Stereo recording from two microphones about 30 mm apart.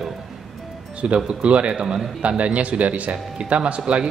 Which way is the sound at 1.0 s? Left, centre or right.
Right.